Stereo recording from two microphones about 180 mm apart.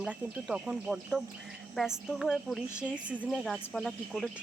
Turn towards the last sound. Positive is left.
turn(degrees=0)  # may be behind; listen again after turning